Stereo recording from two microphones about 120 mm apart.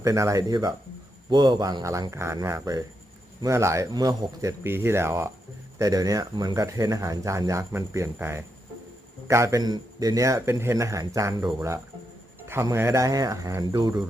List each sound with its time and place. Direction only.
0.0 s speech: 25° right (ahead or behind)
3.9 s speech: 35° right (ahead or behind)
12.5 s speech: 20° right (ahead or behind)
13.7 s speech: 40° right (ahead or behind)